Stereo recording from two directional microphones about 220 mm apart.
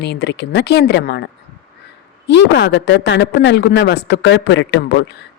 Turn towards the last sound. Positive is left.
turn(degrees=50)  # may be behind; listen again after turning